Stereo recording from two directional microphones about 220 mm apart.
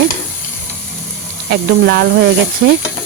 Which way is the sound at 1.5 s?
45° right (ahead or behind).